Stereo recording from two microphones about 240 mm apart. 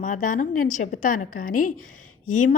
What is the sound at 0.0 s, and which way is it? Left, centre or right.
A woman's voice, left.